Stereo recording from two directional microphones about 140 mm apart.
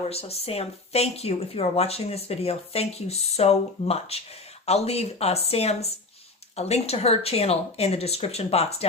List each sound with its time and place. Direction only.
0.0 s speech: 45° left (ahead or behind)